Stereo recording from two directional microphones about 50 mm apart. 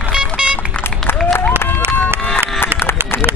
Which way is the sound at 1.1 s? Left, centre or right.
Left.